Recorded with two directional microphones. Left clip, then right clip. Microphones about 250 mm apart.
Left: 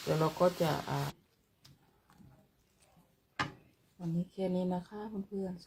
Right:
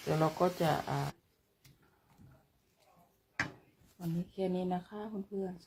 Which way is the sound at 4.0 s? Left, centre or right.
Centre.